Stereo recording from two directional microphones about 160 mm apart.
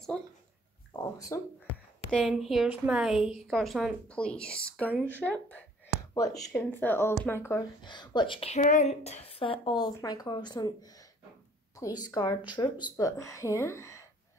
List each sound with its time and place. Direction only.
0.9 s a sound: 20° left (ahead or behind)
2.0 s a woman's voice: centre (ahead or behind)
7.8 s a woman's voice: 30° left (ahead or behind)